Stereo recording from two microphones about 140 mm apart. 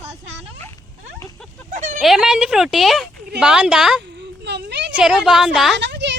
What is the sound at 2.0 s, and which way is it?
Speech, centre (ahead or behind).